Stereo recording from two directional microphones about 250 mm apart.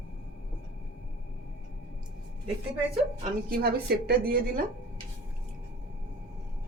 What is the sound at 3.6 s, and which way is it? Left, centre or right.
Speech, right.